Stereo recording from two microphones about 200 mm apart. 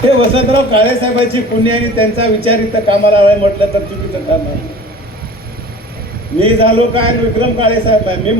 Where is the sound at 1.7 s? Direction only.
30° right (ahead or behind).